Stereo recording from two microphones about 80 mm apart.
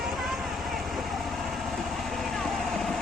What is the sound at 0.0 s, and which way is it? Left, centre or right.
Vehicle, centre.